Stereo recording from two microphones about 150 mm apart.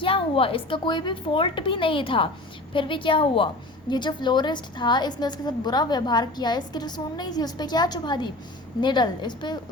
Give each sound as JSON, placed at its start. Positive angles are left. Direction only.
{"t": 0.0, "sound": "a woman's voice", "side_deg": 35}